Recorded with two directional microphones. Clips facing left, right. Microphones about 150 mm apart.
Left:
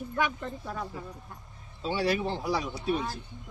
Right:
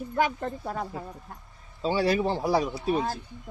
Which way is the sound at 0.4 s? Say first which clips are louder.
Right 5 dB; 55° right (ahead or behind).